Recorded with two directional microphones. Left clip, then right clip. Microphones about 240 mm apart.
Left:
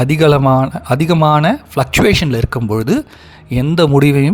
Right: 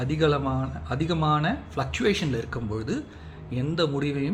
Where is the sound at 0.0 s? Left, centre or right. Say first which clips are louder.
Left 13 dB; left.